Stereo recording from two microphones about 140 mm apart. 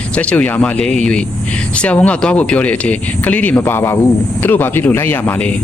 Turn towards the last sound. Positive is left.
turn(degrees=10)  # may be behind; listen again after turning